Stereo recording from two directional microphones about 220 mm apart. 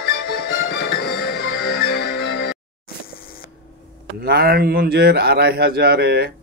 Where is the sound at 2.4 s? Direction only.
45° left (ahead or behind).